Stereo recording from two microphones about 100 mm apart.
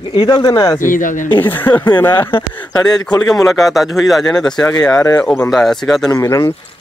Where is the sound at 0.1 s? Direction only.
50° left (ahead or behind).